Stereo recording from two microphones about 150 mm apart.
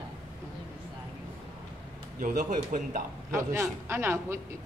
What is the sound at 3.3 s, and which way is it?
A man's voice, 20° right (ahead or behind).